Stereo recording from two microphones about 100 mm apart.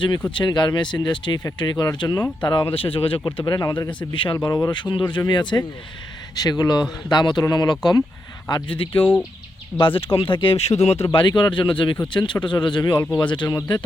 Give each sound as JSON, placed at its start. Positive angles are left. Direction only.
{"t": 0.3, "sound": "speech", "side_deg": 50}
{"t": 3.4, "sound": "speech", "side_deg": 45}
{"t": 4.1, "sound": "speech", "side_deg": 55}
{"t": 4.4, "sound": "speech", "side_deg": 35}
{"t": 4.8, "sound": "speech", "side_deg": 50}
{"t": 11.2, "sound": "speech", "side_deg": 50}